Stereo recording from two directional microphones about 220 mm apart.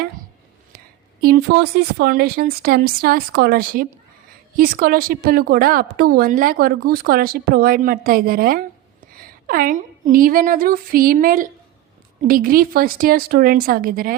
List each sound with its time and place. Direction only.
1.2 s a woman's voice: 45° right (ahead or behind)